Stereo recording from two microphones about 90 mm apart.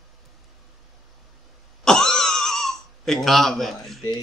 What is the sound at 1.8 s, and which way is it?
Throat clearing, 5° left (ahead or behind).